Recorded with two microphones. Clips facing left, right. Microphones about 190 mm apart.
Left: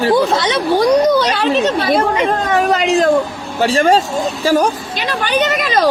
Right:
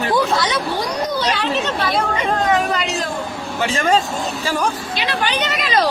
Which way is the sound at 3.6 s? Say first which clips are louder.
Left 5 dB; 35° left (ahead or behind).